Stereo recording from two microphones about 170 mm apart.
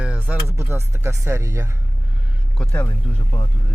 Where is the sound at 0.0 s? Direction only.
10° right (ahead or behind).